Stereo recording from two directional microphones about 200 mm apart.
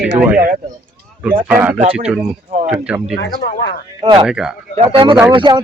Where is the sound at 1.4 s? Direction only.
10° right (ahead or behind).